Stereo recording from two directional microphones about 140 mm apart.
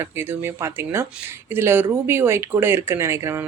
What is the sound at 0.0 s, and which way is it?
Speech, 15° right (ahead or behind).